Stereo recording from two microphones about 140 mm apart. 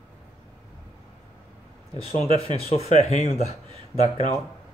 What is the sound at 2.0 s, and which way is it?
Speech, 50° left (ahead or behind).